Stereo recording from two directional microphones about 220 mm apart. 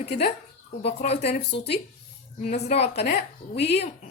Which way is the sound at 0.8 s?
30° left (ahead or behind).